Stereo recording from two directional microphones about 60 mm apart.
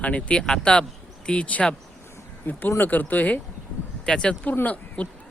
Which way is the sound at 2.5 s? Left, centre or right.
Left.